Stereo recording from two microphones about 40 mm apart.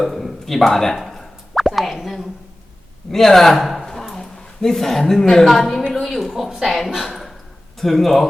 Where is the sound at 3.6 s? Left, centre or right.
Centre.